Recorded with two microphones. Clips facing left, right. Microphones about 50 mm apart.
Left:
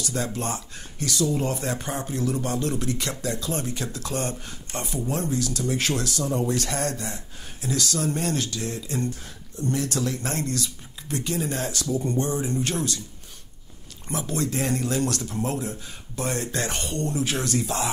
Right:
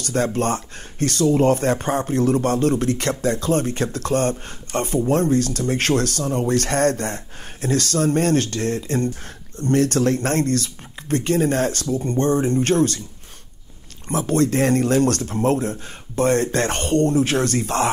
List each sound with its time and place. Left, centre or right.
0.0 s speech: right
14.2 s speech: right